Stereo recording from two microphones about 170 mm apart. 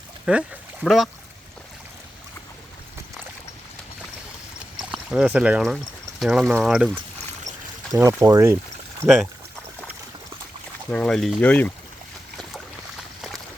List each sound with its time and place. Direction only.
0.3 s speech: 5° right (ahead or behind)
4.8 s speech: 5° right (ahead or behind)
7.9 s speech: 20° right (ahead or behind)
10.9 s speech: 5° left (ahead or behind)